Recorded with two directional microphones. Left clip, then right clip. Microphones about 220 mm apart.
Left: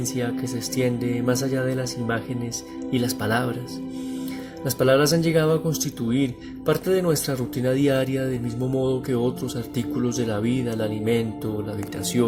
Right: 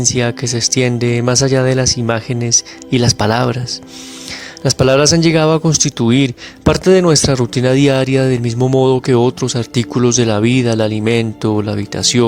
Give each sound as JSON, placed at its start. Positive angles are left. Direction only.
{"t": 0.0, "sound": "speech", "side_deg": -55}
{"t": 4.6, "sound": "speech", "side_deg": -55}
{"t": 5.6, "sound": "speech", "side_deg": -35}
{"t": 6.1, "sound": "speech", "side_deg": -55}